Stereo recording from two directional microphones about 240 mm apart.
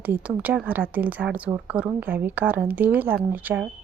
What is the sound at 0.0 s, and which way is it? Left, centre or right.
A woman's voice, centre.